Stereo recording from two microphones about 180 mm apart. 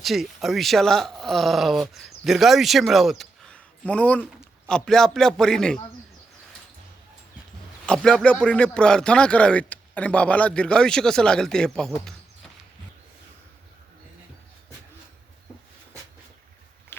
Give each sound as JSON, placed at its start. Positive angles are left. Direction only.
{"t": 0.0, "sound": "speech", "side_deg": 0}
{"t": 7.9, "sound": "speech", "side_deg": 5}
{"t": 16.9, "sound": "a sound", "side_deg": 15}